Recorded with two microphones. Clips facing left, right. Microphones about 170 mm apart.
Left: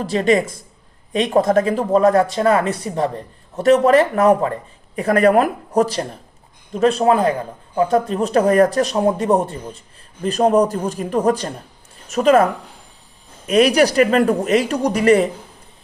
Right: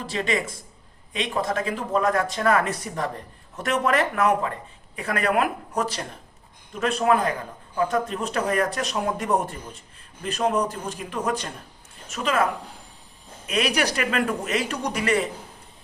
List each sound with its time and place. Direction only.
0.0 s speech: 40° left (ahead or behind)
13.5 s speech: 40° left (ahead or behind)